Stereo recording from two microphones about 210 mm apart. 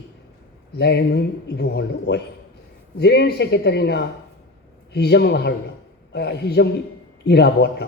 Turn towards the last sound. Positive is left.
turn(degrees=55)  # may be behind; listen again after turning